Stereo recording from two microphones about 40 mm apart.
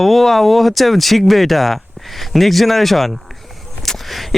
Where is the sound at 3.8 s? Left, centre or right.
Centre.